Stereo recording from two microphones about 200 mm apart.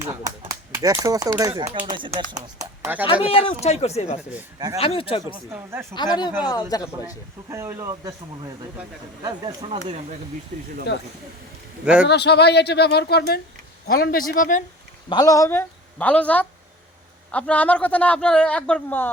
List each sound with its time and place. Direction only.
0.0 s speech: 15° right (ahead or behind)
3.2 s a man's voice: 30° left (ahead or behind)
7.5 s speech: 15° right (ahead or behind); by 10.2 s 30° right (ahead or behind)
12.0 s speech: 55° left (ahead or behind)
15.1 s a man's voice: 20° left (ahead or behind)